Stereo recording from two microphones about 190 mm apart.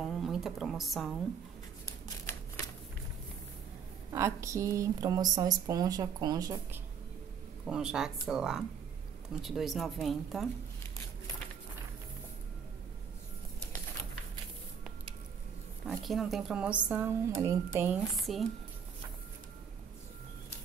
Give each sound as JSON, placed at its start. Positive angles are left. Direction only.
{"t": 0.0, "sound": "speech", "side_deg": 0}
{"t": 4.1, "sound": "speech", "side_deg": -15}
{"t": 7.6, "sound": "speech", "side_deg": -5}
{"t": 15.8, "sound": "speech", "side_deg": 0}
{"t": 18.1, "sound": "speech", "side_deg": 0}